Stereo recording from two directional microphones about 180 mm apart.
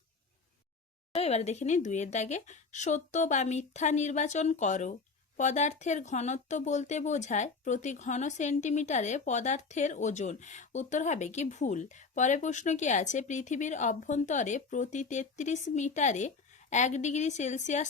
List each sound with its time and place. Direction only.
1.1 s speech: 35° left (ahead or behind)